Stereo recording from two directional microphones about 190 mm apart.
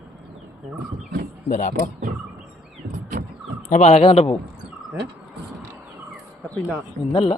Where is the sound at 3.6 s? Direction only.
35° left (ahead or behind).